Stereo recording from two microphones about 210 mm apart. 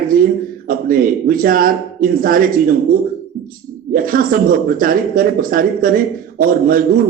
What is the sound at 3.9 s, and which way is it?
A man's voice, 45° right (ahead or behind).